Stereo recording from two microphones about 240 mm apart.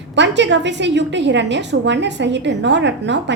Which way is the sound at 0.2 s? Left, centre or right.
Right.